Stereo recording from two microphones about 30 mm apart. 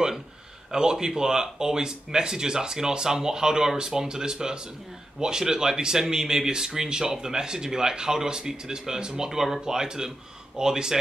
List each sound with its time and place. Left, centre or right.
0.7 s speech: right